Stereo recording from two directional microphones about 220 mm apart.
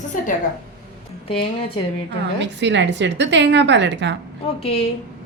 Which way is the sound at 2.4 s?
50° right (ahead or behind).